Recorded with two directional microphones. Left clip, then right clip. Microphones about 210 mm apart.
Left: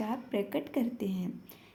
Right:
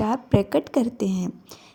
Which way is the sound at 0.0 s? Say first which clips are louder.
Right 11 dB; 40° right (ahead or behind).